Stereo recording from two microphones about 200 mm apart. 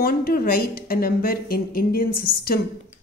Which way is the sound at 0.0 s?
50° left (ahead or behind).